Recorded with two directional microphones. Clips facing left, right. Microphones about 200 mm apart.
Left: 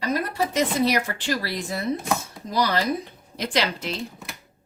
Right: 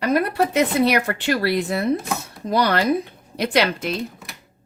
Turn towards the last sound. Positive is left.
turn(degrees=-55)  # may be behind; listen again after turning